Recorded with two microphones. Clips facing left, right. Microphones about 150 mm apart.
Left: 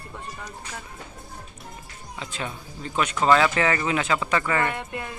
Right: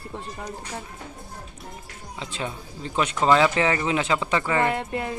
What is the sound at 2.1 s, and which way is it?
Speech, 25° right (ahead or behind).